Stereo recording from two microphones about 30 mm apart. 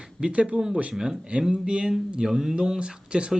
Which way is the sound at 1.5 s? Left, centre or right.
Right.